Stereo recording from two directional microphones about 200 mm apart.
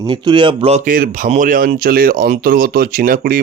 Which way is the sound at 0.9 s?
45° right (ahead or behind).